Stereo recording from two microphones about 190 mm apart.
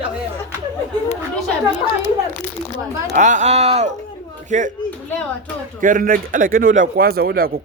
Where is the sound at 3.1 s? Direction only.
40° right (ahead or behind).